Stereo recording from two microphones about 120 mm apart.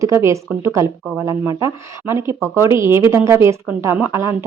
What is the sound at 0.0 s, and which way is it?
A woman's voice, 25° right (ahead or behind).